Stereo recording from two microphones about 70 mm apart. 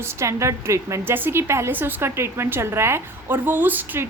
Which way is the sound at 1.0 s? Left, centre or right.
Right.